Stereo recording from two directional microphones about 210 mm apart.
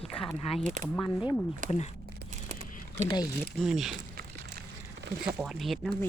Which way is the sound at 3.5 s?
Centre (ahead or behind).